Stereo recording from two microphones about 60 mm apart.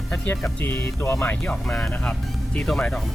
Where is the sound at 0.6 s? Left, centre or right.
Left.